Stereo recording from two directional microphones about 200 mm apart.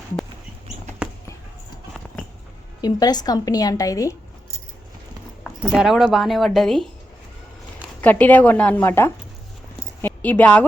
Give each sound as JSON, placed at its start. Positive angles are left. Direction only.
{"t": 1.0, "sound": "basketball bounce", "side_deg": -5}
{"t": 2.8, "sound": "a woman's voice", "side_deg": 20}
{"t": 5.4, "sound": "speech", "side_deg": -5}
{"t": 8.0, "sound": "a woman's voice", "side_deg": 10}